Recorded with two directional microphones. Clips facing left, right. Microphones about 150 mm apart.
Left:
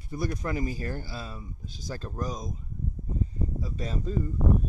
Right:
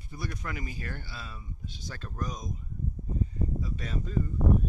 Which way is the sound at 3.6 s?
35° left (ahead or behind).